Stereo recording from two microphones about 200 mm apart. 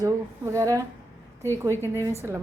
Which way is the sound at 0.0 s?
15° right (ahead or behind).